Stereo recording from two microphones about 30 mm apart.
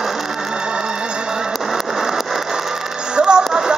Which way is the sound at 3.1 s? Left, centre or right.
Right.